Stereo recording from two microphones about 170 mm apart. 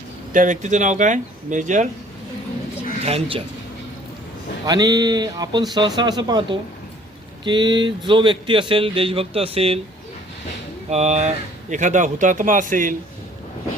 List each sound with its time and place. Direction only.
0.3 s speech: 45° right (ahead or behind)
3.0 s speech: 35° right (ahead or behind)
4.6 s speech: 20° right (ahead or behind)
10.8 s speech: 40° right (ahead or behind)